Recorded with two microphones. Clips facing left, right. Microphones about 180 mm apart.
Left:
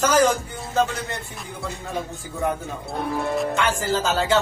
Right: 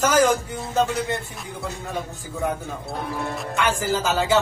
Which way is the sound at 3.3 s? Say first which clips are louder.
Even; centre (ahead or behind).